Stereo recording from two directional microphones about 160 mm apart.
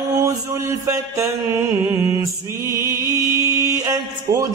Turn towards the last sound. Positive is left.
turn(degrees=-25)  # may be behind; listen again after turning